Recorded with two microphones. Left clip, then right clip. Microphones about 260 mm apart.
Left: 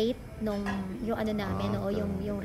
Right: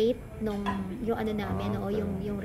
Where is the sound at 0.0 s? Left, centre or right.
Centre.